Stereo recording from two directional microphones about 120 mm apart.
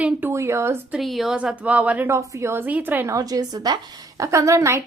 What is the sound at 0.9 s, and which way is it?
A woman's voice, centre (ahead or behind).